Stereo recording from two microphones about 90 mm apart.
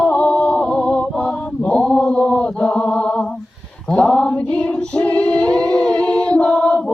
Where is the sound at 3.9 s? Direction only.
10° left (ahead or behind).